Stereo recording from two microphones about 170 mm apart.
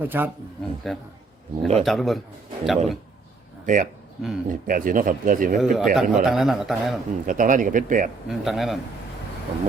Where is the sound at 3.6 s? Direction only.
50° right (ahead or behind).